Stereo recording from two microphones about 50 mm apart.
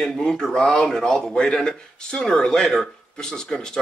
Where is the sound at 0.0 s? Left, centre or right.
Centre.